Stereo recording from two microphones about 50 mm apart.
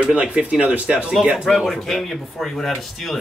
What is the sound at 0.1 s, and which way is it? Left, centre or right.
Speech, right.